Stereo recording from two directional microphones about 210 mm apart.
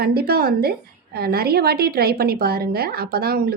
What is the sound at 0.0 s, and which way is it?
A woman's voice, 50° right (ahead or behind).